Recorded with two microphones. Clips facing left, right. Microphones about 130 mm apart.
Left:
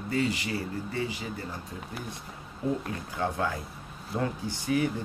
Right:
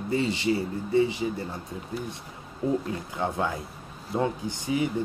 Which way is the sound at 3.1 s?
20° right (ahead or behind).